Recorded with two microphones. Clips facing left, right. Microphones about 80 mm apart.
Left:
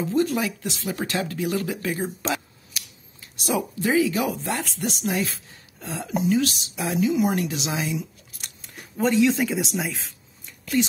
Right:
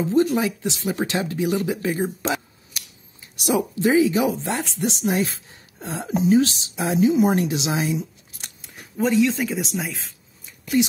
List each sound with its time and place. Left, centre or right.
0.0 s speech: right
3.4 s a woman's voice: right
8.9 s speech: centre
10.6 s a sound: centre